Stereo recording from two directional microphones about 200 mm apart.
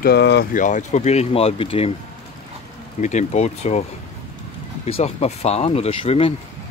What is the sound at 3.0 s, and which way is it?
Speech, 35° left (ahead or behind).